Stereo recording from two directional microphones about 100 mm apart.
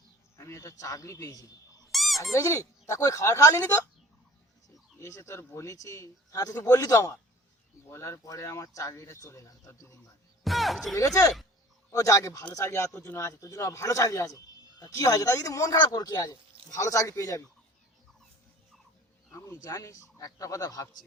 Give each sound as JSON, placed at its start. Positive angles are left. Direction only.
{"t": 0.3, "sound": "a man's voice", "side_deg": 30}
{"t": 1.9, "sound": "a sound", "side_deg": 0}
{"t": 2.3, "sound": "a man's voice", "side_deg": 30}
{"t": 4.9, "sound": "a man's voice", "side_deg": 30}
{"t": 10.4, "sound": "a sound", "side_deg": 0}
{"t": 10.9, "sound": "a man's voice", "side_deg": 35}
{"t": 19.3, "sound": "a man's voice", "side_deg": 35}